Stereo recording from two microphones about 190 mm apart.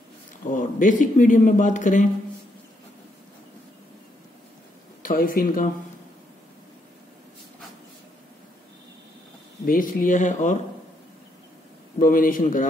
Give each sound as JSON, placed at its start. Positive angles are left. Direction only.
{"t": 0.5, "sound": "speech", "side_deg": 40}
{"t": 5.0, "sound": "speech", "side_deg": 45}
{"t": 9.7, "sound": "speech", "side_deg": 45}
{"t": 12.0, "sound": "speech", "side_deg": 45}